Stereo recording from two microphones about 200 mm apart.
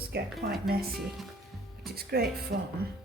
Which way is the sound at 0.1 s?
50° right (ahead or behind).